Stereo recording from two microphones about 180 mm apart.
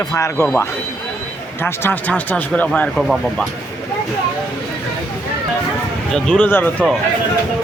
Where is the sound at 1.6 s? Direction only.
10° left (ahead or behind).